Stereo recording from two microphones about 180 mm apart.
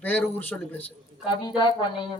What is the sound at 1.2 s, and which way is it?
Speech, 25° left (ahead or behind).